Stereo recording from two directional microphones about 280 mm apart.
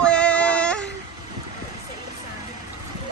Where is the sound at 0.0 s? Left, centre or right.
Centre.